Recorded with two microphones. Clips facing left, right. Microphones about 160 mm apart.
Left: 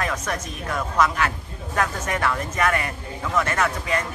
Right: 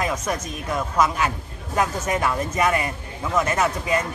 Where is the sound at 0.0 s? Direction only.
15° right (ahead or behind).